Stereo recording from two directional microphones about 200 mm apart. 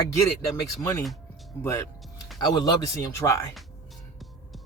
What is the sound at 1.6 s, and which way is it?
Speech, 15° left (ahead or behind).